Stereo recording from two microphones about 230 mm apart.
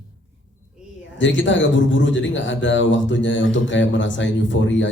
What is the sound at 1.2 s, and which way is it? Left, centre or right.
A man's voice, left.